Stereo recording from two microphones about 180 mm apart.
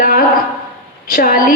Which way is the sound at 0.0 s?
50° left (ahead or behind).